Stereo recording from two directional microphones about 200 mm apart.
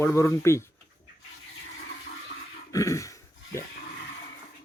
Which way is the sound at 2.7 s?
15° left (ahead or behind).